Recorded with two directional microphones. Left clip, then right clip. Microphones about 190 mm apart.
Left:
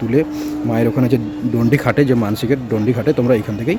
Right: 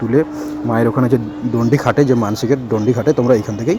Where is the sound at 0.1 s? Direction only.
10° left (ahead or behind).